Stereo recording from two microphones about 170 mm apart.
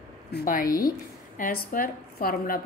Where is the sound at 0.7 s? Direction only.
20° left (ahead or behind).